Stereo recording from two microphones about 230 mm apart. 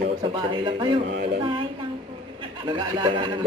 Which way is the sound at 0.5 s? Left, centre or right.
Right.